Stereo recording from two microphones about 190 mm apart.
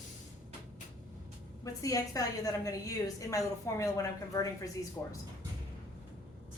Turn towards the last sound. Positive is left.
turn(degrees=10)  # may be behind; listen again after turning